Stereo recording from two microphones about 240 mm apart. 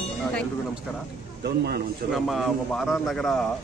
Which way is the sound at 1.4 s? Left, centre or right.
Right.